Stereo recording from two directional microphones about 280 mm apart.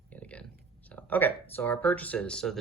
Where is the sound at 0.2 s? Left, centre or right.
Centre.